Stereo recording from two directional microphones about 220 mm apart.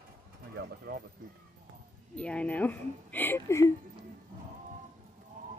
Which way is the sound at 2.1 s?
5° left (ahead or behind).